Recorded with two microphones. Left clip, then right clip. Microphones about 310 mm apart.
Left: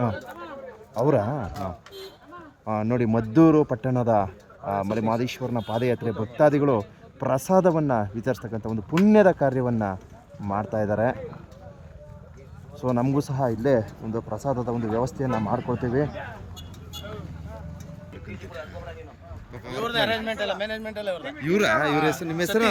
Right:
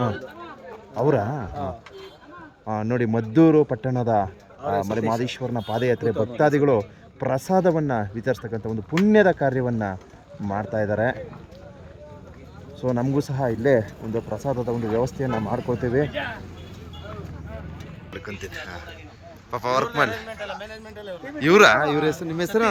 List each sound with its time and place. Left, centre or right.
0.9 s speech: centre
2.6 s speech: centre
12.8 s speech: centre
19.5 s speech: centre
19.9 s speech: left
21.4 s speech: centre